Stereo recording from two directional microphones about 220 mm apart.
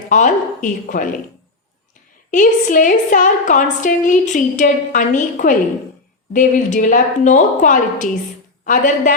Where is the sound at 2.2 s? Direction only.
35° left (ahead or behind).